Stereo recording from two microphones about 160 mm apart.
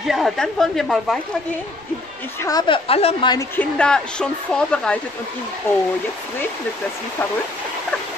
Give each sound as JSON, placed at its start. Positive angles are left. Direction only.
{"t": 0.0, "sound": "speech", "side_deg": 0}
{"t": 2.4, "sound": "a woman's voice", "side_deg": 30}
{"t": 3.3, "sound": "speech", "side_deg": 10}